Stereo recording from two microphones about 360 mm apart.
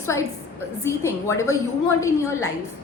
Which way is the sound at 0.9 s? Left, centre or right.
Centre.